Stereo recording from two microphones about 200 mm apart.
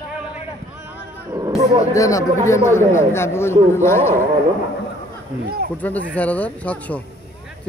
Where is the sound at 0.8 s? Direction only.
15° right (ahead or behind).